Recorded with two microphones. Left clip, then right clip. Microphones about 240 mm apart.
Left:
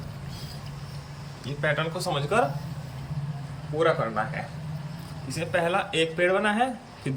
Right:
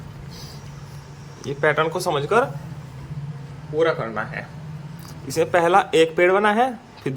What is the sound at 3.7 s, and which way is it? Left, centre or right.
Speech, centre.